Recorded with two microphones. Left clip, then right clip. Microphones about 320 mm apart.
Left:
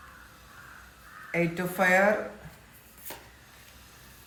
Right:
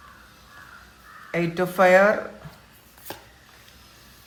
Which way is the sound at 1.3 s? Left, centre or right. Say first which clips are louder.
Right 4 dB; centre.